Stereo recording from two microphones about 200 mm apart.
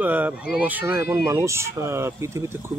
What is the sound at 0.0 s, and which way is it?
Speech, 10° right (ahead or behind).